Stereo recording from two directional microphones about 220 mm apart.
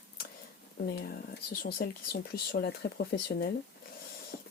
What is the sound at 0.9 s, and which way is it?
Speech, 45° left (ahead or behind).